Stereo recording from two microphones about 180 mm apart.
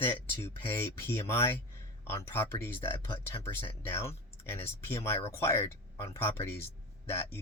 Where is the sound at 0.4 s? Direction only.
15° left (ahead or behind).